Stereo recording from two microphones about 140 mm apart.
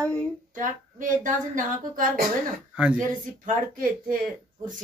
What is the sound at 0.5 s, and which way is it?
Speech, 65° right (ahead or behind).